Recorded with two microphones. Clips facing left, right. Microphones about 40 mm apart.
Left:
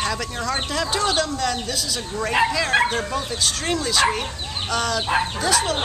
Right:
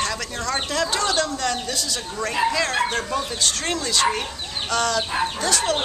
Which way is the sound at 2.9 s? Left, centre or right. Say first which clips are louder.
Even; centre.